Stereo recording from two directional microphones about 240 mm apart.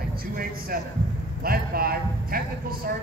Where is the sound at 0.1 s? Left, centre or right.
Right.